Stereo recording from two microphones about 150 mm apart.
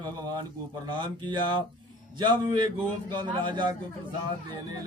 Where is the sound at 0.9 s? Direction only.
30° right (ahead or behind).